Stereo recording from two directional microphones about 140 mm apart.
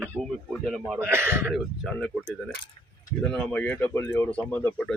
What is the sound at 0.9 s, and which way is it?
Speech, 15° right (ahead or behind).